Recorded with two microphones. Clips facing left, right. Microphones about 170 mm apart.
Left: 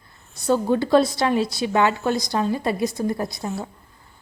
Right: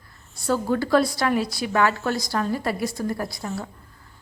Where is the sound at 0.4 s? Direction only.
20° left (ahead or behind).